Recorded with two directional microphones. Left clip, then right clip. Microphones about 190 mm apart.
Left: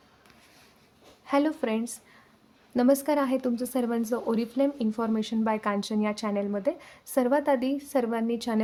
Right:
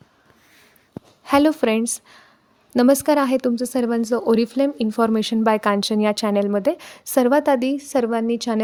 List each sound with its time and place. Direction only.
1.2 s a woman's voice: 45° right (ahead or behind)